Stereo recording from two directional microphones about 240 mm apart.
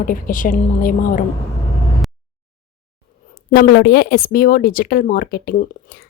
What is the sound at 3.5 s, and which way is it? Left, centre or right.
Speech, left.